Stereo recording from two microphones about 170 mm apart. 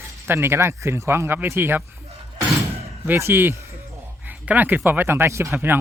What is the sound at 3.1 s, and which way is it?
Speech, 15° right (ahead or behind).